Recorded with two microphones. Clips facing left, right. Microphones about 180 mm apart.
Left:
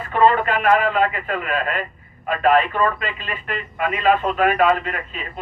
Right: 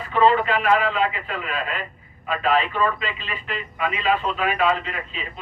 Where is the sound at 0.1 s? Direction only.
50° left (ahead or behind).